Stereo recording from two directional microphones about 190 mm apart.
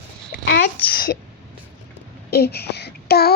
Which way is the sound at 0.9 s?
50° left (ahead or behind).